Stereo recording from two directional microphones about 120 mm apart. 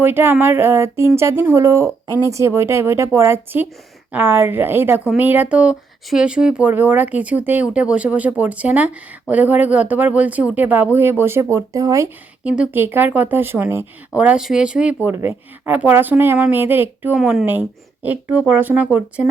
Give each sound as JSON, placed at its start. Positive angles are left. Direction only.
{"t": 0.0, "sound": "speech", "side_deg": -20}
{"t": 12.5, "sound": "speech", "side_deg": -15}
{"t": 17.2, "sound": "speech", "side_deg": -5}
{"t": 17.4, "sound": "speech", "side_deg": -15}